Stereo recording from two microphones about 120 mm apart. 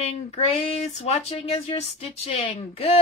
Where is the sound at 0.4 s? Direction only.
60° left (ahead or behind).